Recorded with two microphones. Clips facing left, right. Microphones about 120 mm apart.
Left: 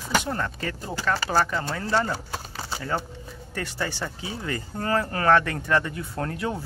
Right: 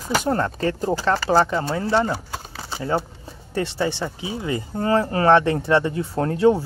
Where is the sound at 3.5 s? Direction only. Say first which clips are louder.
Right 8 dB; 25° right (ahead or behind).